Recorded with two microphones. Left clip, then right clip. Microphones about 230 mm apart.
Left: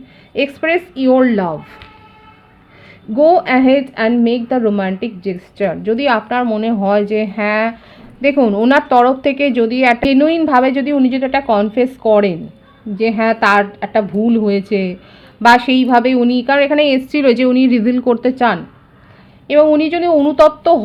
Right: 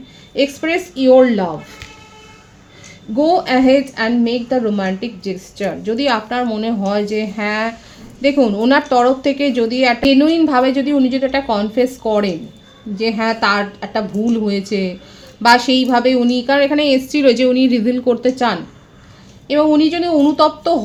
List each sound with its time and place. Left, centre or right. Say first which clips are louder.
0.3 s a woman's voice: left 2 dB; left
3.2 s a woman's voice: left 3 dB; left